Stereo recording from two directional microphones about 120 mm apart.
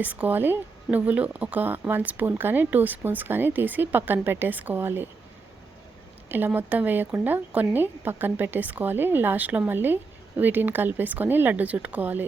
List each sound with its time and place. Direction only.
0.0 s speech: 15° right (ahead or behind)
6.2 s speech: 15° right (ahead or behind)